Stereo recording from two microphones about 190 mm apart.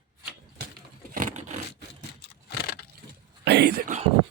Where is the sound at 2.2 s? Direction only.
60° left (ahead or behind).